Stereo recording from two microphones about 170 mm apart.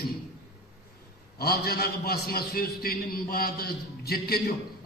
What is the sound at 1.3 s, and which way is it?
A man's voice, 70° left (ahead or behind).